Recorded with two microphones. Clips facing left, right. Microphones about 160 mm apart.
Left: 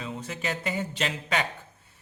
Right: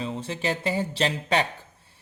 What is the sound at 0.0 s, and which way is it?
Speech, 30° right (ahead or behind).